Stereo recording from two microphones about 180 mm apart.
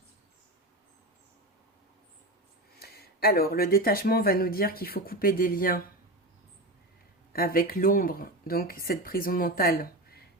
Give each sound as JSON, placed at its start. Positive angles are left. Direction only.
{"t": 2.7, "sound": "speech", "side_deg": 60}
{"t": 7.3, "sound": "speech", "side_deg": 55}